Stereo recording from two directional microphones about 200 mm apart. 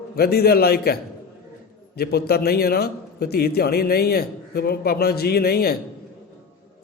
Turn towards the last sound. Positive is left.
turn(degrees=50)  # may be behind; listen again after turning